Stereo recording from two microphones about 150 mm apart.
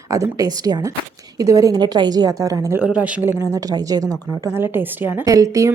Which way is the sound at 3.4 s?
20° right (ahead or behind).